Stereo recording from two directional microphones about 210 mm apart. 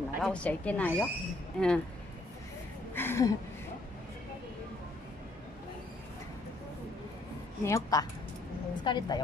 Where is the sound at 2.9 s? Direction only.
10° left (ahead or behind).